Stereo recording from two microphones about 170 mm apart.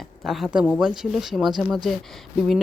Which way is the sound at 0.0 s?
Centre (ahead or behind).